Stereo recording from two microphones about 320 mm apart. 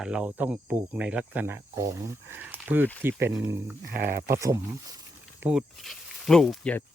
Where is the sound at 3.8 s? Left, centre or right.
Right.